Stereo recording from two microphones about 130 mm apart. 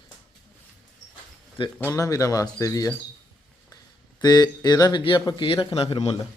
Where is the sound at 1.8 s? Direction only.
20° left (ahead or behind).